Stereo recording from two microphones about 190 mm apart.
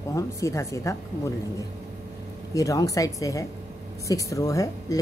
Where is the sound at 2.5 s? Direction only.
15° left (ahead or behind).